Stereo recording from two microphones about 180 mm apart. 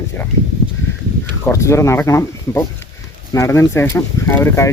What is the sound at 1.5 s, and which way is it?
Speech, 15° left (ahead or behind).